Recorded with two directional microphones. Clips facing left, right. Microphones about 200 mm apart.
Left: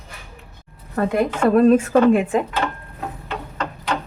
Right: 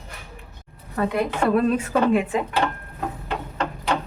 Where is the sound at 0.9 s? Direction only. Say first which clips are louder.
Left 3 dB; 45° left (ahead or behind).